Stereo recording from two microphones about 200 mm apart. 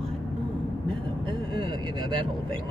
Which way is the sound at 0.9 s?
25° right (ahead or behind).